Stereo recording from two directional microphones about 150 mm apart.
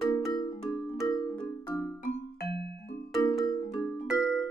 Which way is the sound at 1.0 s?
25° left (ahead or behind).